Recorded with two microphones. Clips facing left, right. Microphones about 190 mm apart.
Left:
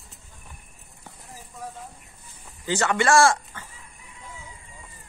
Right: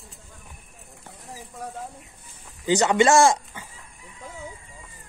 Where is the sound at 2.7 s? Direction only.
20° right (ahead or behind).